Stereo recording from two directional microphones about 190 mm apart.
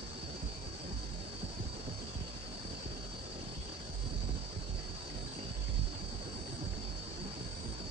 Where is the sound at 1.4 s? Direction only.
30° right (ahead or behind).